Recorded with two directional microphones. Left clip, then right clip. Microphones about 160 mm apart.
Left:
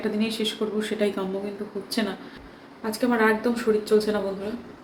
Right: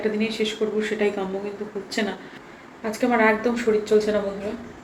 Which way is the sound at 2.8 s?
10° left (ahead or behind).